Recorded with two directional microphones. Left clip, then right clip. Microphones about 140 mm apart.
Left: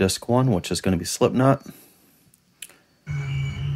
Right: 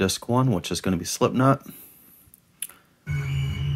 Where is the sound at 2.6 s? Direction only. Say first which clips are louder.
Right 1 dB; 25° left (ahead or behind).